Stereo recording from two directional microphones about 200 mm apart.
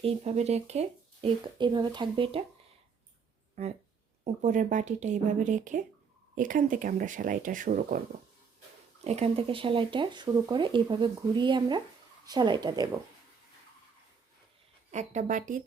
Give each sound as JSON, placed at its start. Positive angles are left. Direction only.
{"t": 0.0, "sound": "speech", "side_deg": -30}
{"t": 3.5, "sound": "speech", "side_deg": -35}
{"t": 9.0, "sound": "speech", "side_deg": -30}
{"t": 14.9, "sound": "speech", "side_deg": -40}